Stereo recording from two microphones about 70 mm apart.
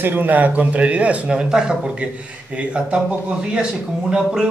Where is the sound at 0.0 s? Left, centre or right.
Right.